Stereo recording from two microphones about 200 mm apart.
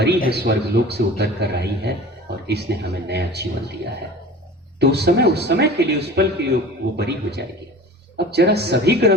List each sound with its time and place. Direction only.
0.3 s a man's voice: 55° right (ahead or behind)
4.8 s a man's voice: 55° right (ahead or behind)